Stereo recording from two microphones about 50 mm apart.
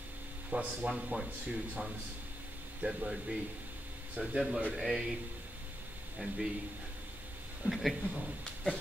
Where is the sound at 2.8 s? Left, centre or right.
Centre.